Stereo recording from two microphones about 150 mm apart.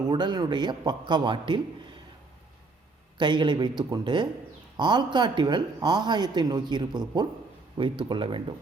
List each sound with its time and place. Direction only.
0.0 s a man's voice: 30° right (ahead or behind)
3.2 s a man's voice: 30° right (ahead or behind)